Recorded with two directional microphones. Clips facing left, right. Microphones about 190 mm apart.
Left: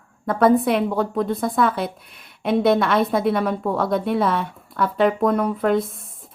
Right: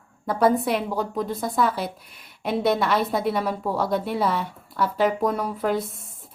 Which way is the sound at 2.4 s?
60° left (ahead or behind).